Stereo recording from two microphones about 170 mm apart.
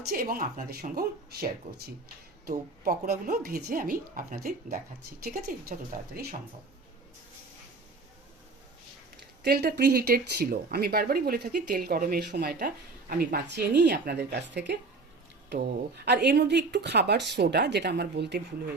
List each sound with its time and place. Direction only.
0.1 s speech: 60° right (ahead or behind)
9.4 s speech: 65° right (ahead or behind); by 14.8 s 80° right
15.4 s speech: 70° right (ahead or behind)